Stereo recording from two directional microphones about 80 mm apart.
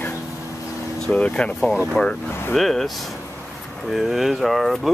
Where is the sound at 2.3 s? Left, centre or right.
Left.